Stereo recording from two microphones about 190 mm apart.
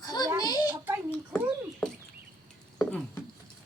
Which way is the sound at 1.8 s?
5° left (ahead or behind).